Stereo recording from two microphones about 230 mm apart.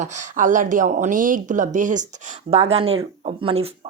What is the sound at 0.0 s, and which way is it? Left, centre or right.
Speech, right.